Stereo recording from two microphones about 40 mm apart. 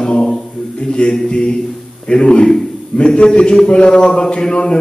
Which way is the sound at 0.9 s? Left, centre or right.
Left.